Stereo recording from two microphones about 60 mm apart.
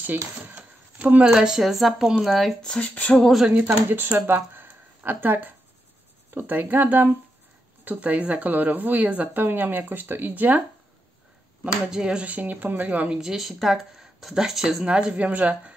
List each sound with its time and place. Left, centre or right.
0.6 s a sound: right
1.3 s speech: centre
2.6 s speech: centre
3.4 s speech: right
11.9 s speech: centre
12.3 s speech: right
13.1 s speech: centre